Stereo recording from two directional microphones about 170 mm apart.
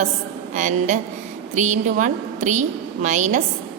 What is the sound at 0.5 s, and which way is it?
A woman's voice, 45° right (ahead or behind).